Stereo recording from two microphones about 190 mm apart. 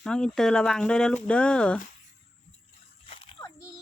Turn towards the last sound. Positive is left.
turn(degrees=15)  # may be behind; listen again after turning